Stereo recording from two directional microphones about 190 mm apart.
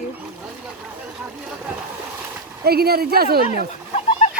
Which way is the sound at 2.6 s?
55° right (ahead or behind).